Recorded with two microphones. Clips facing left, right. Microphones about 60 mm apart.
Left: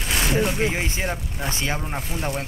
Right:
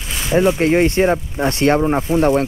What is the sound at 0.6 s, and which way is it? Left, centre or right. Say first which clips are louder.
Speech: right 11 dB; right.